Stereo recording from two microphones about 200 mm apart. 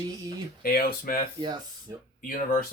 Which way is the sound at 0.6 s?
45° left (ahead or behind).